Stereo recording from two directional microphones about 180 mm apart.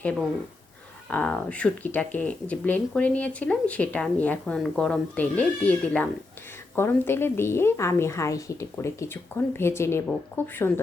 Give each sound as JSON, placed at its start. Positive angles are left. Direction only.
{"t": 0.0, "sound": "speech", "side_deg": 5}